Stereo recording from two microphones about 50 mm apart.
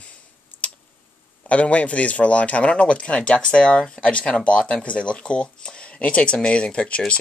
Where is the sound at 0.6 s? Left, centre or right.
Left.